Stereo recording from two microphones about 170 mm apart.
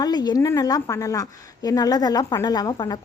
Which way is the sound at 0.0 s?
25° left (ahead or behind).